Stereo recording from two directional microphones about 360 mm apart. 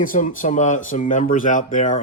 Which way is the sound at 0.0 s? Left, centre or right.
Left.